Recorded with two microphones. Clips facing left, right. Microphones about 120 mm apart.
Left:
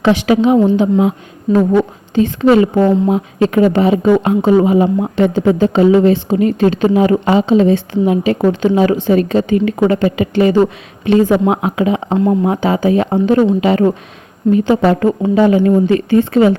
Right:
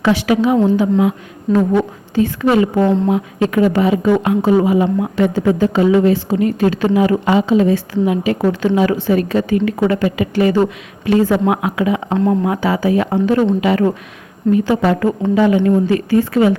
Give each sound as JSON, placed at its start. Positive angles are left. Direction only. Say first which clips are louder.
{"t": 0.0, "sound": "a woman's voice", "louder": "left 3 dB", "side_deg": 25}
{"t": 1.5, "sound": "speech", "louder": "left 2 dB", "side_deg": 0}
{"t": 2.1, "sound": "a woman's voice", "louder": "left 3 dB", "side_deg": 25}
{"t": 12.1, "sound": "speech", "louder": "left 2 dB", "side_deg": 5}
{"t": 12.5, "sound": "a woman's voice", "louder": "left 2 dB", "side_deg": 25}